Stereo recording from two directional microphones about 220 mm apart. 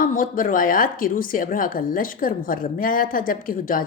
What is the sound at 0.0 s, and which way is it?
Speech, 40° left (ahead or behind).